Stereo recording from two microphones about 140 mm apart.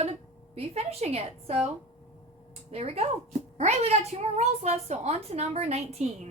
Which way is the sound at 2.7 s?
45° right (ahead or behind).